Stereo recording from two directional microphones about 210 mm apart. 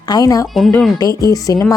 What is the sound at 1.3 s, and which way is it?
Speech, 15° left (ahead or behind).